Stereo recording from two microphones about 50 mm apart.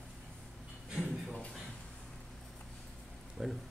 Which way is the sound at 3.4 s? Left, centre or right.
Centre.